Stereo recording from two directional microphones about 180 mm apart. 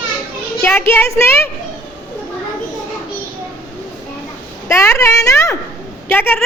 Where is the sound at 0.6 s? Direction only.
15° left (ahead or behind).